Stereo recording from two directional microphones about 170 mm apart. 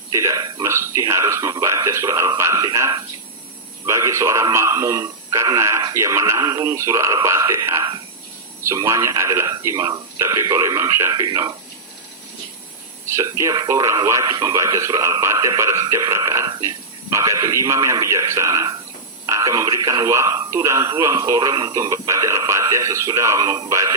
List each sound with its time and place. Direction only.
0.1 s speech: 20° right (ahead or behind)
13.1 s speech: 15° right (ahead or behind)